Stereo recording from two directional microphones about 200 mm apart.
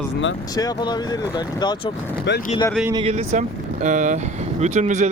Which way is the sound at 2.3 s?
60° left (ahead or behind).